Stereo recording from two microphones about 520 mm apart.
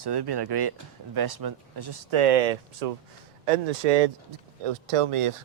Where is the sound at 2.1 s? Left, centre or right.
Right.